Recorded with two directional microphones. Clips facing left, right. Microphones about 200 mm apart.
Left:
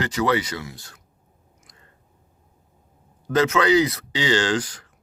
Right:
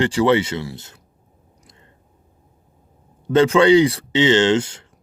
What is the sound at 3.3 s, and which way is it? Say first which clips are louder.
Speech: right 6 dB; 30° right (ahead or behind).